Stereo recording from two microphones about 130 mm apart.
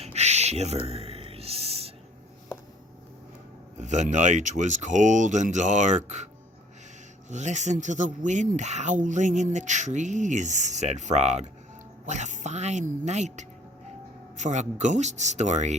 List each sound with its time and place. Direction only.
0.0 s a sound: 55° right (ahead or behind)
3.8 s speech: 70° right (ahead or behind)
7.3 s a woman's voice: 65° right (ahead or behind)